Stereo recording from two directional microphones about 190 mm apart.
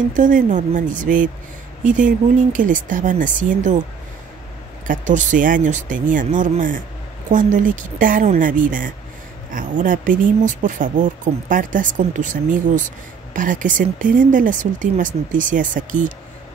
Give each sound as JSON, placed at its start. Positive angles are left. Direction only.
{"t": 0.1, "sound": "speech", "side_deg": -40}
{"t": 4.8, "sound": "speech", "side_deg": -40}